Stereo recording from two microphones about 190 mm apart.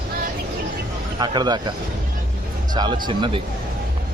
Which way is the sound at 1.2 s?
20° right (ahead or behind).